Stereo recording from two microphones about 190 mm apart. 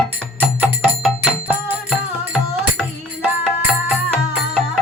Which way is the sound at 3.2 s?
5° right (ahead or behind).